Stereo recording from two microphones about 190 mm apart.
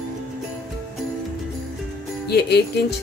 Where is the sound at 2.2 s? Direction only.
60° left (ahead or behind).